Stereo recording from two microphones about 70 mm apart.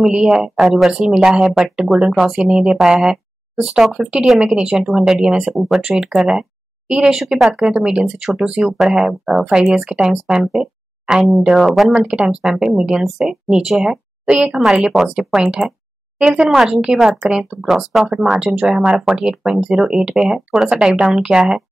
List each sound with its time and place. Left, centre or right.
0.0 s speech: centre
12.1 s speech: centre